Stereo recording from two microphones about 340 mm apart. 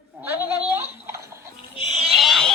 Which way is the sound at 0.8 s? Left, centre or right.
Centre.